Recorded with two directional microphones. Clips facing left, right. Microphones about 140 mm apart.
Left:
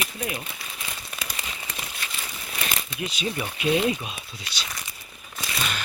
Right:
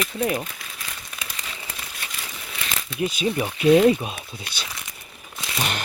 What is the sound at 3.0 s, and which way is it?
Speech, 45° right (ahead or behind).